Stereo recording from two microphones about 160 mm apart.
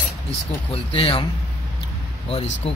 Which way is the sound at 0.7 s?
35° left (ahead or behind).